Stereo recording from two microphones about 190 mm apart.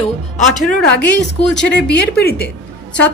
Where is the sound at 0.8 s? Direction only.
60° left (ahead or behind).